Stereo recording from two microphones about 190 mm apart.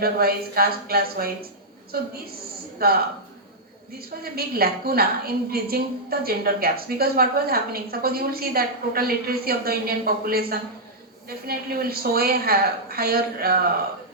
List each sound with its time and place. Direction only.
0.0 s a woman's voice: 55° right (ahead or behind)
4.1 s a woman's voice: 50° right (ahead or behind)